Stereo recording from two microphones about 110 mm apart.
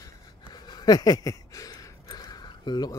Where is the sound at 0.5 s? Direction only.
40° left (ahead or behind).